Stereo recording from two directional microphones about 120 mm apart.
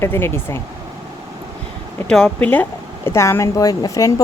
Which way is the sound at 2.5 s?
15° left (ahead or behind).